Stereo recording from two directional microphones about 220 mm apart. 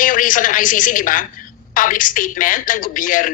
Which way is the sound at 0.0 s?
35° left (ahead or behind).